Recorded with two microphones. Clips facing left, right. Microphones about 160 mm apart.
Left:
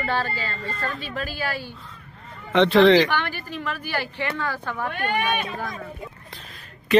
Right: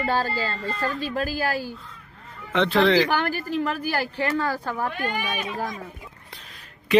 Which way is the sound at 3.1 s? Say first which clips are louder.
Right 3 dB; 40° right (ahead or behind).